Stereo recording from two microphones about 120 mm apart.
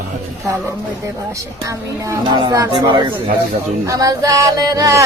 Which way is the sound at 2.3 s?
40° right (ahead or behind).